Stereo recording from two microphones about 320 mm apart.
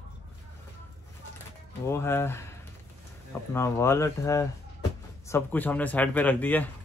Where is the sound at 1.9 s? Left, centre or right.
Centre.